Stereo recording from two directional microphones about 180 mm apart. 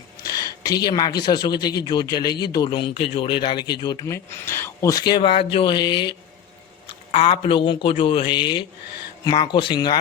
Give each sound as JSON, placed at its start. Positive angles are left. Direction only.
{"t": 0.3, "sound": "speech", "side_deg": 20}